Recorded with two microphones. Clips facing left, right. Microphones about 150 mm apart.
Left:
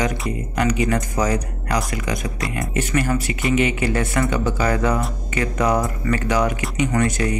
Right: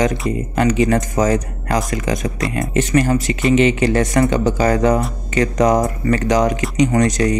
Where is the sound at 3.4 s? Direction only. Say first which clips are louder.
Right 6 dB; 25° right (ahead or behind).